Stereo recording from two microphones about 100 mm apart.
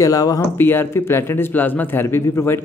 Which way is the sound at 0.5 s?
20° left (ahead or behind).